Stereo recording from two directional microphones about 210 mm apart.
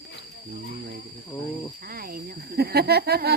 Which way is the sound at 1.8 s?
45° right (ahead or behind).